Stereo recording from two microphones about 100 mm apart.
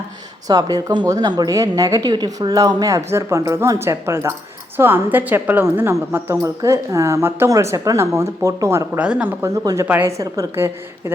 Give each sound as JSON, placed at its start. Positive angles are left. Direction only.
{"t": 0.4, "sound": "a woman's voice", "side_deg": -40}
{"t": 9.0, "sound": "speech", "side_deg": -10}
{"t": 10.1, "sound": "a woman's voice", "side_deg": -30}